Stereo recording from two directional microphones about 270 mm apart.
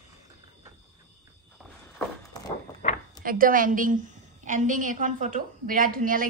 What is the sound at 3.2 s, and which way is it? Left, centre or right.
A woman's voice, right.